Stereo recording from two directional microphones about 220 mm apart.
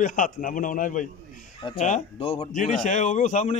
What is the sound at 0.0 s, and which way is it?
A man's voice, 35° left (ahead or behind).